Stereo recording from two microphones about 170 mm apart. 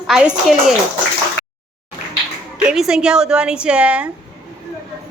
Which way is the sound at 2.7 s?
5° right (ahead or behind).